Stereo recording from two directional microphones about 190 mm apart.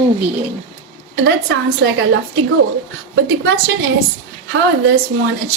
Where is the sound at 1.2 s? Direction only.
65° right (ahead or behind).